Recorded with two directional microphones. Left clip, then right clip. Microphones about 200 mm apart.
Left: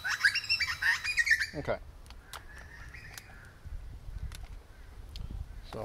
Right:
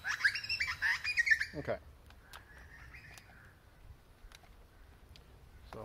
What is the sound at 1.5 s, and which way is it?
Speech, 10° left (ahead or behind).